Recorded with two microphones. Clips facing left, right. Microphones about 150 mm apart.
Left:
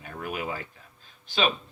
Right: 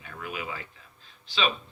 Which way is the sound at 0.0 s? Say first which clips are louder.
Left 4 dB; 45° left (ahead or behind).